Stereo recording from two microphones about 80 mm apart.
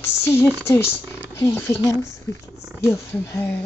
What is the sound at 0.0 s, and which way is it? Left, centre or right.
Speech, left.